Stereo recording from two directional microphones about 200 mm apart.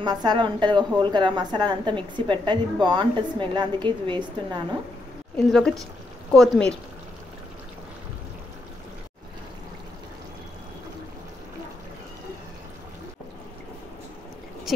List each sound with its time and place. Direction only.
0.0 s a woman's voice: 20° right (ahead or behind)
5.5 s speech: centre (ahead or behind)